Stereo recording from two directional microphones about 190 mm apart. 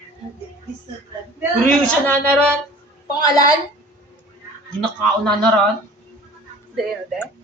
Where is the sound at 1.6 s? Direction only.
5° left (ahead or behind).